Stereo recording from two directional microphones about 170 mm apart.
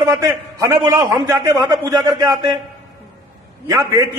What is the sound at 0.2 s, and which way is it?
A man's voice, 20° right (ahead or behind).